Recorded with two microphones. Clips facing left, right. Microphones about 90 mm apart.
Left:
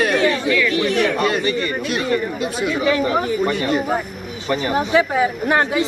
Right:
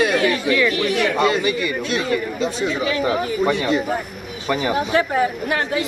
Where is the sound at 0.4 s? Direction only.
25° right (ahead or behind).